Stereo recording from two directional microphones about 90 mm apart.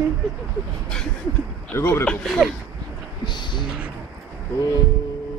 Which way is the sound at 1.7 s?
30° left (ahead or behind).